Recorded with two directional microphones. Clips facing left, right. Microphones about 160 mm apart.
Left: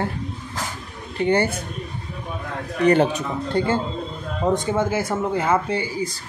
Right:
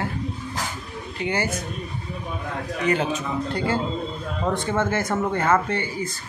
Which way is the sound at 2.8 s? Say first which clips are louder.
Left 7 dB; 35° left (ahead or behind).